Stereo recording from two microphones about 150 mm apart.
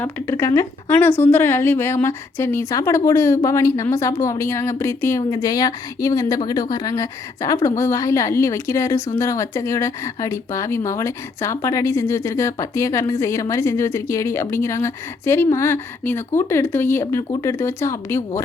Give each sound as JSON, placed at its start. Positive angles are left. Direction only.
{"t": 0.0, "sound": "speech", "side_deg": 15}